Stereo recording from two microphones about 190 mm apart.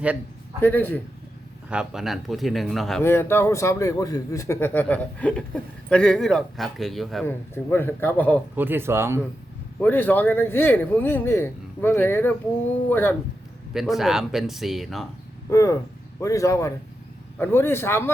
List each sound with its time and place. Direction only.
0.6 s speech: 10° left (ahead or behind)
1.7 s speech: 5° right (ahead or behind)
3.0 s speech: 10° left (ahead or behind)
7.3 s speech: 10° left (ahead or behind)
8.5 s speech: 10° right (ahead or behind)
9.8 s speech: 10° left (ahead or behind)
13.7 s speech: centre (ahead or behind)
15.4 s speech: 15° left (ahead or behind)